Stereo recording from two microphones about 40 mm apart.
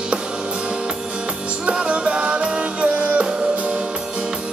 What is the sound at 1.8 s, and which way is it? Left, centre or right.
Music, right.